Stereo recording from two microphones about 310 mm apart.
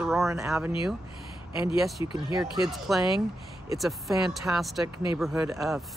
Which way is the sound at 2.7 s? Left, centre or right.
Centre.